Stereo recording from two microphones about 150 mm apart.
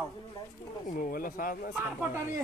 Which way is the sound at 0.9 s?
70° left (ahead or behind).